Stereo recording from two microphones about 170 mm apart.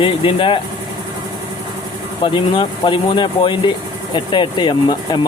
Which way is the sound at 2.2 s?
30° left (ahead or behind).